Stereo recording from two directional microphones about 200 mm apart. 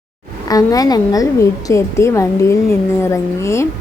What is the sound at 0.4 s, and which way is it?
A woman's voice, 20° left (ahead or behind).